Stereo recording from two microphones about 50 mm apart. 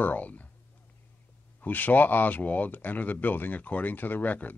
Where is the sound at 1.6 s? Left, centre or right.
Left.